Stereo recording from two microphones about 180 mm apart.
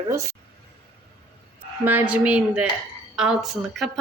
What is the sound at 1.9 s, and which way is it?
Speech, 10° right (ahead or behind).